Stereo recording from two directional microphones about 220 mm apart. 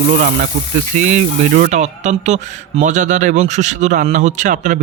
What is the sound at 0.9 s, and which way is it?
Speech, 35° right (ahead or behind).